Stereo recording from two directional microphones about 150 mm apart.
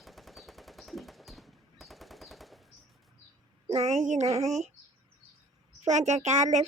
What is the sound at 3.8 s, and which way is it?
Speech, 55° right (ahead or behind).